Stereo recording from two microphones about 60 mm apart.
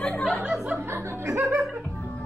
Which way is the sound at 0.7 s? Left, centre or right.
Right.